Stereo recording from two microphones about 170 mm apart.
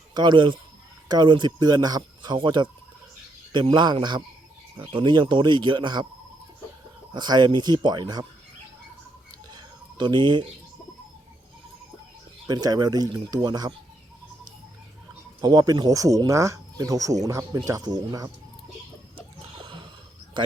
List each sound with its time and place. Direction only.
0.1 s speech: 25° right (ahead or behind)
7.1 s speech: 25° right (ahead or behind)
9.6 s a sound: 25° right (ahead or behind)
12.5 s speech: 25° right (ahead or behind)
15.4 s speech: 25° right (ahead or behind)
20.4 s speech: 25° right (ahead or behind)